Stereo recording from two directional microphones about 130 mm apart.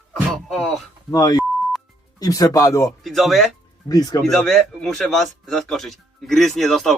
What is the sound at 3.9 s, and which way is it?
Speech, 30° left (ahead or behind).